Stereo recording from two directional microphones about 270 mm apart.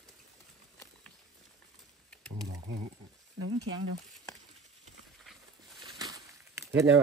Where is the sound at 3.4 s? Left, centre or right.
Right.